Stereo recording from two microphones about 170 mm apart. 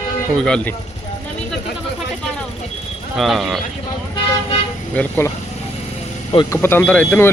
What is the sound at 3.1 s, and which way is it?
Speech, centre (ahead or behind).